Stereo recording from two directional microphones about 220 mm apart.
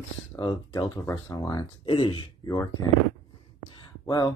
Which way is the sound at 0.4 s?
20° left (ahead or behind).